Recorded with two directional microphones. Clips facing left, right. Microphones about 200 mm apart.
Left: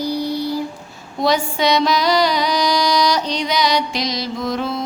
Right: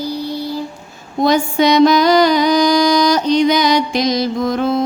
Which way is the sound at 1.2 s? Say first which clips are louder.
Right 4 dB; 50° right (ahead or behind).